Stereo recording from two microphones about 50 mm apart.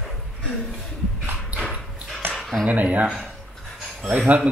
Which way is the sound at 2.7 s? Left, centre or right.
Right.